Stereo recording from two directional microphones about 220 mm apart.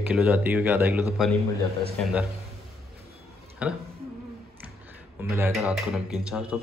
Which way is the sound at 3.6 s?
5° right (ahead or behind).